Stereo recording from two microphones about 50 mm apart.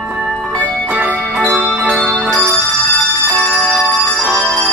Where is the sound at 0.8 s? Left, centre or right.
Right.